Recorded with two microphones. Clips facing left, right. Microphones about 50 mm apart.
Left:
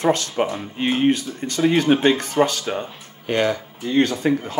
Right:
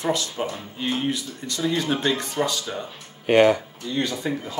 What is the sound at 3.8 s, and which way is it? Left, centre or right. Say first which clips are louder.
Speech: left 8 dB; left.